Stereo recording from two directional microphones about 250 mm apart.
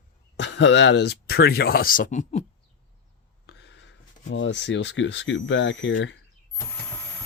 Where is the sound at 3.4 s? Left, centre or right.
Left.